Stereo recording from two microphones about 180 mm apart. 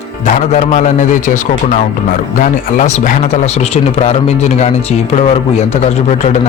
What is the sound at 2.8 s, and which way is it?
Speech, 40° left (ahead or behind).